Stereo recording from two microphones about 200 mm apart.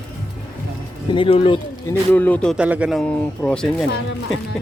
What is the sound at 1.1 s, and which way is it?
Speech, 25° left (ahead or behind).